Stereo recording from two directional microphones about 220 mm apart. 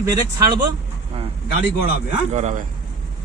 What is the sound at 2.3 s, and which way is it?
Speech, 30° right (ahead or behind).